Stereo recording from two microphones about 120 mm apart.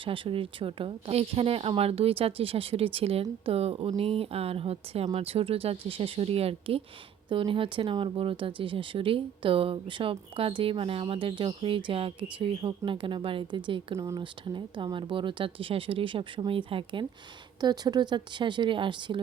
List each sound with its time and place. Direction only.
0.0 s speech: 45° right (ahead or behind)
13.9 s speech: 25° right (ahead or behind)
14.2 s a woman's voice: 40° right (ahead or behind)